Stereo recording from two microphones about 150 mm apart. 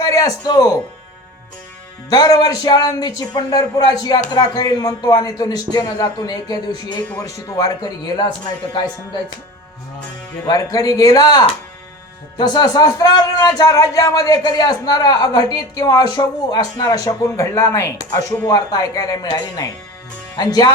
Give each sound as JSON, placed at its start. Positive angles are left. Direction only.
{"t": 0.0, "sound": "speech", "side_deg": 25}
{"t": 2.0, "sound": "speech", "side_deg": 25}
{"t": 10.4, "sound": "speech", "side_deg": 25}